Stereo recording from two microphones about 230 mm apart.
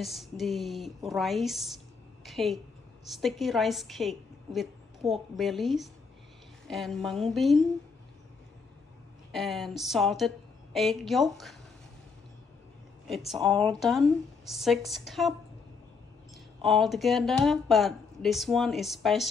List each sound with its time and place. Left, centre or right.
0.0 s a woman's voice: centre
9.3 s a woman's voice: centre
13.7 s a woman's voice: centre
16.6 s a woman's voice: centre